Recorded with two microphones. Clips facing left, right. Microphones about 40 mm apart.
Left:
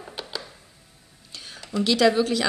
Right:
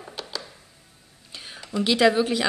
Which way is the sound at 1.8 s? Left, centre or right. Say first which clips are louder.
Even; centre.